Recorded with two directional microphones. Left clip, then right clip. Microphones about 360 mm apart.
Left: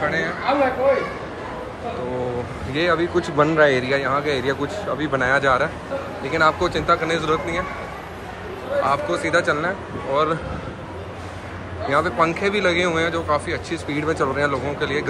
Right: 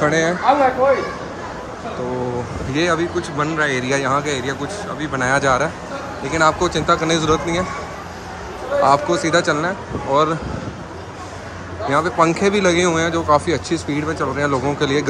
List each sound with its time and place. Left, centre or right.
0.0 s speech: centre
2.7 s speech: centre
8.8 s speech: centre
11.9 s speech: centre